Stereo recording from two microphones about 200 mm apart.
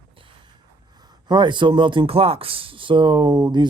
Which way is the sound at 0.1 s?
25° right (ahead or behind).